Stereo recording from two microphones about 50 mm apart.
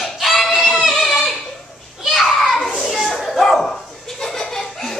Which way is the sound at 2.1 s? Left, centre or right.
Centre.